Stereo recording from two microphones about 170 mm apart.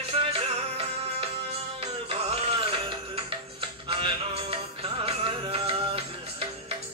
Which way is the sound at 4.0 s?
30° right (ahead or behind).